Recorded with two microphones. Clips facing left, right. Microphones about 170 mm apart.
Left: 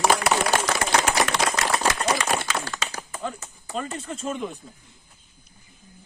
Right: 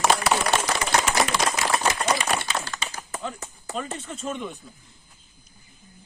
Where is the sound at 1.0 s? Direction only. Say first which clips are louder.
Left 1 dB; 75° left (ahead or behind); by 2.8 s 90° left.